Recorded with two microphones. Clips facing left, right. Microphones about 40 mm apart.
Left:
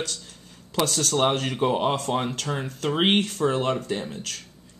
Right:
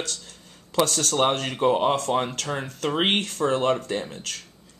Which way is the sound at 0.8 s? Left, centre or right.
Centre.